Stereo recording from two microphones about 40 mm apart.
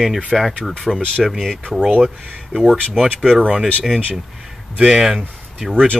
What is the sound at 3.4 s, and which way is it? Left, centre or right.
Speech, right.